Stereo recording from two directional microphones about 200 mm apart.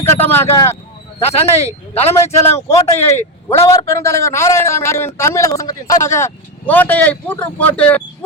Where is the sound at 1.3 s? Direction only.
30° left (ahead or behind).